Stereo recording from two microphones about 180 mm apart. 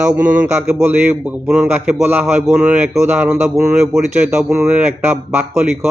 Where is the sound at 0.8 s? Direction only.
5° right (ahead or behind).